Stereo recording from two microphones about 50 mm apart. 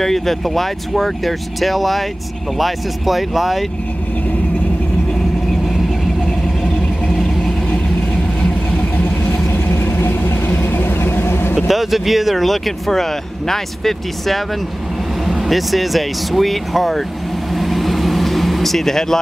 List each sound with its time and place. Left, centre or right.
0.0 s speech: centre
8.9 s vehicle: left
9.5 s vehicle: left
11.6 s speech: centre
17.6 s vehicle: centre